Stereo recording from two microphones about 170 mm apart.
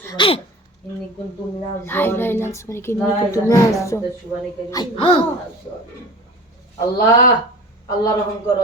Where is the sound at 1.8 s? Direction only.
10° left (ahead or behind); by 5.2 s 25° left (ahead or behind).